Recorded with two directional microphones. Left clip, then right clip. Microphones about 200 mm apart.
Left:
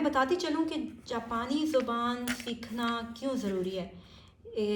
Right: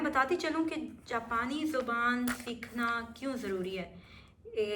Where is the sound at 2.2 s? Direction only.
20° right (ahead or behind).